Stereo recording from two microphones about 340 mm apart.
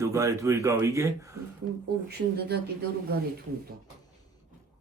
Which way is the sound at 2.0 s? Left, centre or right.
Right.